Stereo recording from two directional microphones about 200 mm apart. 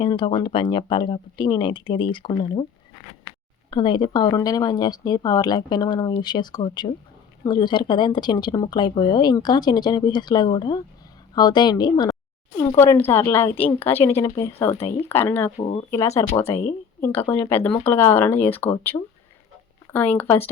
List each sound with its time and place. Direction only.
0.0 s speech: 25° left (ahead or behind)
3.7 s speech: 25° left (ahead or behind)
15.5 s speech: 30° left (ahead or behind)
15.9 s speech: 15° left (ahead or behind)
18.9 s speech: 20° left (ahead or behind)
19.9 s speech: 10° left (ahead or behind)